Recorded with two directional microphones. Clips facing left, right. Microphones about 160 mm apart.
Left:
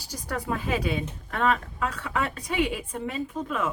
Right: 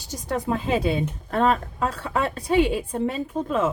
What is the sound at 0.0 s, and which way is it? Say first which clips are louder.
A woman's voice: right 5 dB; 25° right (ahead or behind).